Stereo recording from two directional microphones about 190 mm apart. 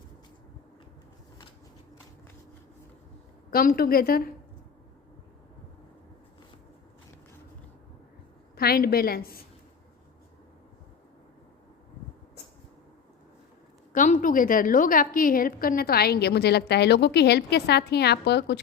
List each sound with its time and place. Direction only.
3.5 s a woman's voice: 50° left (ahead or behind)
8.5 s a woman's voice: 55° left (ahead or behind)
13.9 s a woman's voice: 45° left (ahead or behind); by 18.6 s 60° left (ahead or behind)